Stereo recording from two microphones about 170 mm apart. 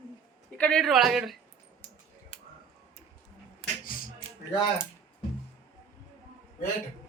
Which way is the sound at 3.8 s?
55° left (ahead or behind).